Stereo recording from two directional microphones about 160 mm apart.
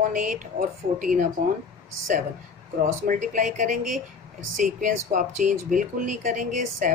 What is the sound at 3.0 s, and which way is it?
Speech, 50° right (ahead or behind).